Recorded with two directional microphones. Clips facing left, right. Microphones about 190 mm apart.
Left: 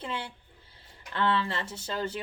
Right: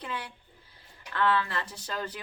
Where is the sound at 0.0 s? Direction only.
25° left (ahead or behind).